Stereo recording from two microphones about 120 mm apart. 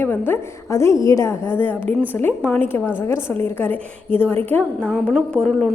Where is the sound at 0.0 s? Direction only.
20° left (ahead or behind).